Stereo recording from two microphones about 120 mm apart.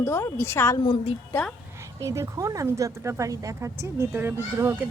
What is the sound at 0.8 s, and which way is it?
Speech, 45° left (ahead or behind).